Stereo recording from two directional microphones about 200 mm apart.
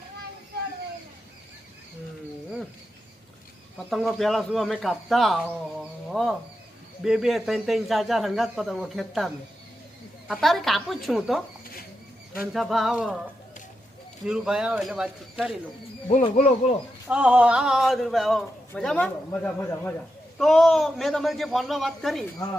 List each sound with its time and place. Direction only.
3.8 s a man's voice: centre (ahead or behind)
12.5 s a man's voice: centre (ahead or behind)
14.3 s a man's voice: 5° right (ahead or behind)
16.0 s speech: 35° left (ahead or behind)
17.1 s a man's voice: 5° right (ahead or behind)